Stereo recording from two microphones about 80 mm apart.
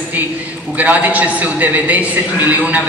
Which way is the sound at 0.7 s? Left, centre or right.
Right.